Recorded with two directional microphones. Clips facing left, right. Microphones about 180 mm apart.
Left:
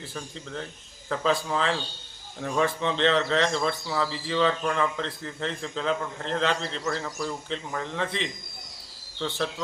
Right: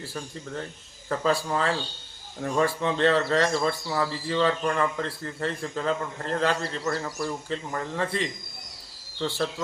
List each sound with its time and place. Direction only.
0.0 s a man's voice: 5° right (ahead or behind)